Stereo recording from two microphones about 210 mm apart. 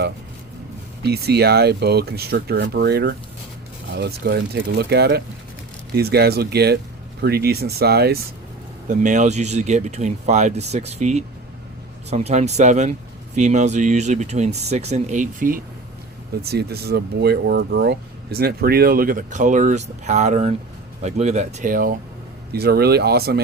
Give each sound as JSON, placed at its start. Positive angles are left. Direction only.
{"t": 1.0, "sound": "speech", "side_deg": -50}
{"t": 8.9, "sound": "speech", "side_deg": -35}